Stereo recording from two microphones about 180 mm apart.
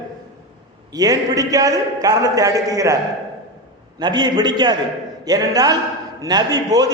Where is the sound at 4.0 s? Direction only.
25° right (ahead or behind).